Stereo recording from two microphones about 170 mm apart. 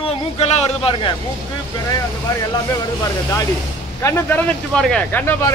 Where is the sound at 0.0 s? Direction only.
35° left (ahead or behind).